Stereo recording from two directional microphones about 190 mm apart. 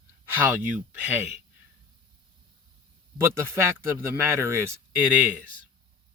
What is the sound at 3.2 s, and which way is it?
Speech, 15° right (ahead or behind).